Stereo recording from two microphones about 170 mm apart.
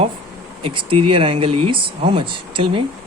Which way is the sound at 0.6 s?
30° right (ahead or behind).